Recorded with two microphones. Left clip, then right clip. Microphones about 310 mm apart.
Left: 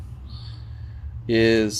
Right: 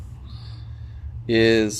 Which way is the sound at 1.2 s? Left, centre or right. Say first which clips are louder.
Right 1 dB; centre.